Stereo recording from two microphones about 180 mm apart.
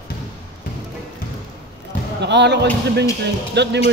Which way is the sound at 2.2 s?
70° right (ahead or behind).